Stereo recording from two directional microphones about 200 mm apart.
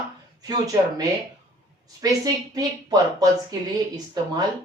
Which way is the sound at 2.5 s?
20° right (ahead or behind).